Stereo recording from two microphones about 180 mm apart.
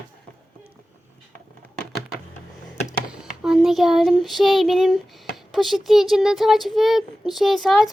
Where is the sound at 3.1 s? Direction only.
5° right (ahead or behind).